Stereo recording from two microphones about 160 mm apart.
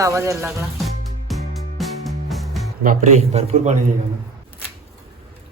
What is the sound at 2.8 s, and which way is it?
Speech, 45° right (ahead or behind).